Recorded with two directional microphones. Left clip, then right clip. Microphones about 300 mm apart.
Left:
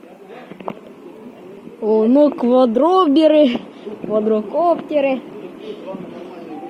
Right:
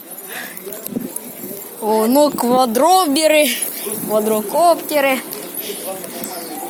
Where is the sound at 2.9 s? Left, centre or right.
Centre.